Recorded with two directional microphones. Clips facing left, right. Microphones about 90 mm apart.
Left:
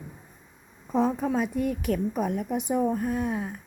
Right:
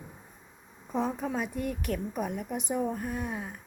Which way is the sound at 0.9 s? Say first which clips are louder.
Left 6 dB; centre (ahead or behind).